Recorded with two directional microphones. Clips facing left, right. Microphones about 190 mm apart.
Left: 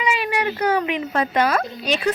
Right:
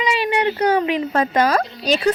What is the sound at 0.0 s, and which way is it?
A woman's voice, 30° right (ahead or behind).